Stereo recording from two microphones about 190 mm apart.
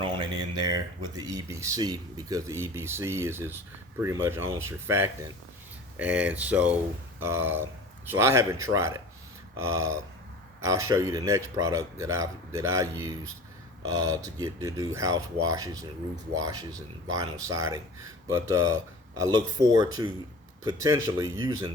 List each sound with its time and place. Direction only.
0.0 s speech: 25° right (ahead or behind)
20.7 s speech: 20° right (ahead or behind)